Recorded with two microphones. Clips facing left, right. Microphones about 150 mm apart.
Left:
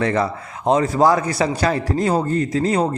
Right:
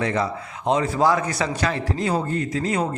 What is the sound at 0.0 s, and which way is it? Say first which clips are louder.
Speech: left 4 dB; 60° left (ahead or behind).